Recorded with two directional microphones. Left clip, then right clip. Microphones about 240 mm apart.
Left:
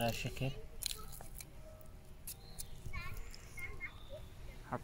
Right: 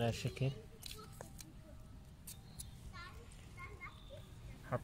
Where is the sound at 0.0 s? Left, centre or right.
Centre.